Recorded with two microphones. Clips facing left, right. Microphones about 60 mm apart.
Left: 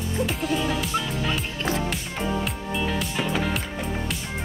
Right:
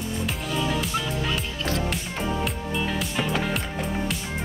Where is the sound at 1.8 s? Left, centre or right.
Centre.